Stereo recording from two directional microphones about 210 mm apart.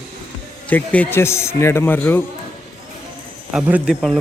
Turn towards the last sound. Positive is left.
turn(degrees=0)  # may be behind; listen again after turning